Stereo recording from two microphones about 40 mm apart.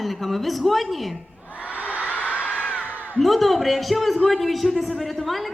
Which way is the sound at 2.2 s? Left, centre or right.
Left.